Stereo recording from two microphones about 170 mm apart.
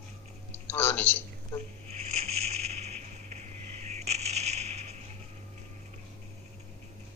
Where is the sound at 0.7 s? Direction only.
10° left (ahead or behind).